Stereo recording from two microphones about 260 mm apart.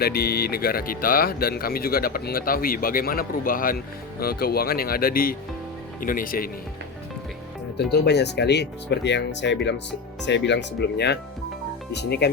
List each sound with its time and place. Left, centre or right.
0.0 s speech: left
7.8 s speech: left